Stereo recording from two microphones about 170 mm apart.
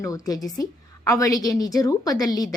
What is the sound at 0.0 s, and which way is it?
A woman's voice, 20° left (ahead or behind).